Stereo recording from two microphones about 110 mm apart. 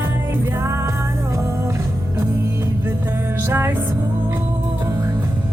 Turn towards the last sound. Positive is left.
turn(degrees=-25)  # may be behind; listen again after turning